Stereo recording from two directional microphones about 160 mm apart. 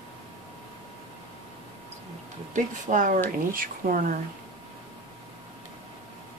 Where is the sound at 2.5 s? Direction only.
55° right (ahead or behind).